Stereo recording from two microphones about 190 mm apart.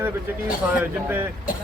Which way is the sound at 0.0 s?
10° right (ahead or behind).